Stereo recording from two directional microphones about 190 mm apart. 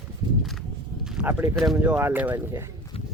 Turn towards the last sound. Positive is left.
turn(degrees=30)  # may be behind; listen again after turning